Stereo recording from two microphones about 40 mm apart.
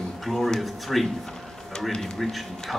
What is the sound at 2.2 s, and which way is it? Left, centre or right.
Speech, centre.